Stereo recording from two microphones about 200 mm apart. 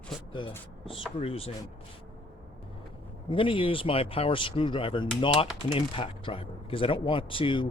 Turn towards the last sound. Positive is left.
turn(degrees=25)  # may be behind; listen again after turning